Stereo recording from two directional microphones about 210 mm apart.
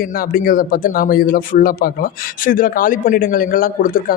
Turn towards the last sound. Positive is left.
turn(degrees=40)  # may be behind; listen again after turning